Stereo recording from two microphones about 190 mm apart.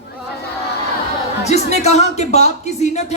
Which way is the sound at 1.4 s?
35° left (ahead or behind).